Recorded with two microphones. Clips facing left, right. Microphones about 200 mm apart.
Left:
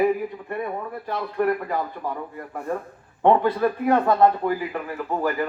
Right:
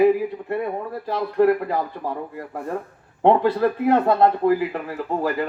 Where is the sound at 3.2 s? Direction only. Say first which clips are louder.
Right 2 dB; 30° right (ahead or behind).